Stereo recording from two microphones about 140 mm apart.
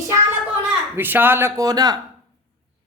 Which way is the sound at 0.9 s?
15° right (ahead or behind).